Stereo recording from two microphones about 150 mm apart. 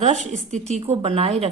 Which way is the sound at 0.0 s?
50° right (ahead or behind).